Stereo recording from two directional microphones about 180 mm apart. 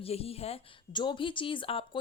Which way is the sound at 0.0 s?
35° left (ahead or behind).